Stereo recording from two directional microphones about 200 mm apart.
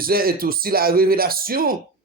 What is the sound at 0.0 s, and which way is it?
A man's voice, 45° right (ahead or behind).